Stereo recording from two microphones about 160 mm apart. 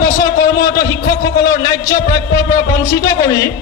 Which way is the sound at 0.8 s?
20° left (ahead or behind).